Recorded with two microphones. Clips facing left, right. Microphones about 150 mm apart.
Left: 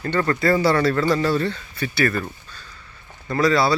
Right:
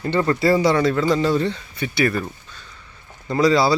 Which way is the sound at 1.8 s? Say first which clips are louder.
Right 1 dB; 5° right (ahead or behind).